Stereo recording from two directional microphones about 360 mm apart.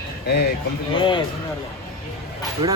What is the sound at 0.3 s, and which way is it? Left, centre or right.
Speech, left.